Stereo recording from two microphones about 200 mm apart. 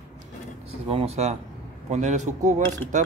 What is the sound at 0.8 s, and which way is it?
Speech, 30° right (ahead or behind).